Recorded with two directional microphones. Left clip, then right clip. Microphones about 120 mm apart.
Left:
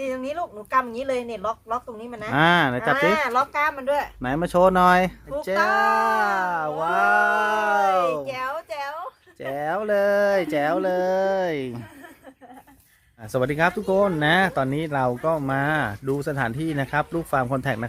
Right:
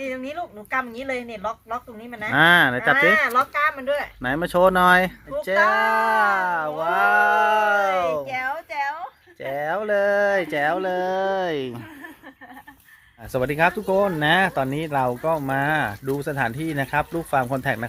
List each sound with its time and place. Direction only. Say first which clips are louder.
0.0 s a woman's voice: left 2 dB; 35° left (ahead or behind)
2.3 s speech: right 3 dB; 15° left (ahead or behind)
3.2 s speech: right 2 dB; 45° left (ahead or behind)
4.2 s speech: right 1 dB; 15° left (ahead or behind)
8.2 s a woman's voice: right 2 dB; 40° left (ahead or behind); by 11.8 s 15° left (ahead or behind)
13.3 s speech: right 1 dB; 15° left (ahead or behind)
13.9 s speech: even; 5° left (ahead or behind)
14.2 s speech: right 1 dB; 20° left (ahead or behind)